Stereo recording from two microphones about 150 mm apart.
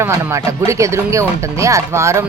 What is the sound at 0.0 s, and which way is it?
Speech, 20° right (ahead or behind).